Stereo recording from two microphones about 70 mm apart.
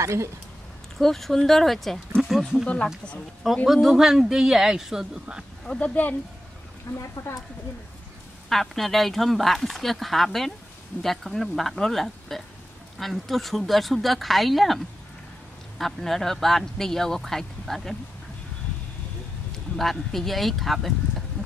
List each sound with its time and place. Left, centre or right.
0.0 s speech: right
0.9 s speech: centre
5.7 s speech: left
6.9 s speech: left
8.5 s speech: centre
15.8 s speech: centre
19.8 s speech: centre